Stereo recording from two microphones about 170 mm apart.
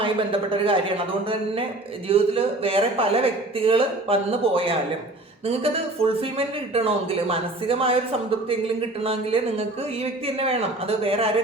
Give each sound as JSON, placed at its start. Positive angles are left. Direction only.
{"t": 0.0, "sound": "speech", "side_deg": -30}
{"t": 2.0, "sound": "speech", "side_deg": -35}
{"t": 9.0, "sound": "speech", "side_deg": -35}